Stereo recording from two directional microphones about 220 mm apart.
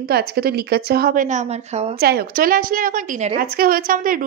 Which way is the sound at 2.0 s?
40° right (ahead or behind).